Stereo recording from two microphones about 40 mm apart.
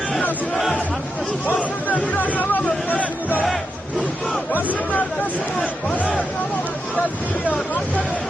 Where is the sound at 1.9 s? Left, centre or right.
Left.